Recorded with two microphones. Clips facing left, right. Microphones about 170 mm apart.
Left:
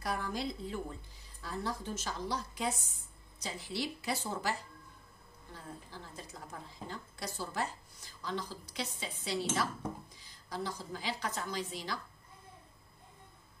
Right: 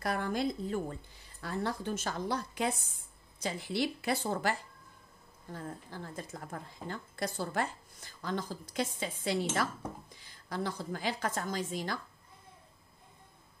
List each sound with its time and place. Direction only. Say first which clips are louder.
0.0 s a woman's voice: right 4 dB; 55° right (ahead or behind)